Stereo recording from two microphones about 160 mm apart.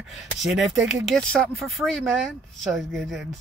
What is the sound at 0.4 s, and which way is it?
Speech, 5° right (ahead or behind).